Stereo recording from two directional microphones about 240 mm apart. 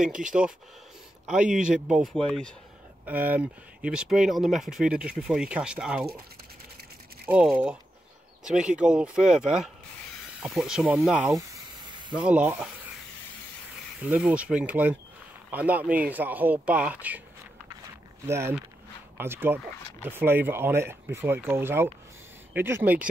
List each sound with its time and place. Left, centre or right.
1.2 s speech: centre
7.2 s speech: centre
11.3 s hiss: centre
12.2 s speech: centre
14.0 s speech: centre
18.2 s speech: centre